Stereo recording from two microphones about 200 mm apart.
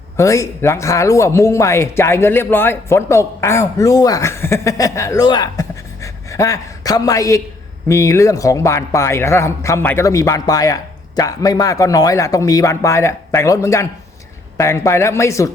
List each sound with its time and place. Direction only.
0.2 s speech: 15° left (ahead or behind)